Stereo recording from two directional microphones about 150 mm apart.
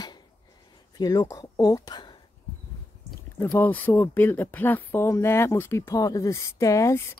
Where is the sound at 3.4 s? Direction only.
15° left (ahead or behind).